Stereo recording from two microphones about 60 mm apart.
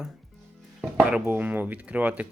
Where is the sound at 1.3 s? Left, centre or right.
Right.